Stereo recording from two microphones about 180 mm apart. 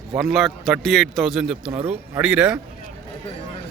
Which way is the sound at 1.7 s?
30° right (ahead or behind).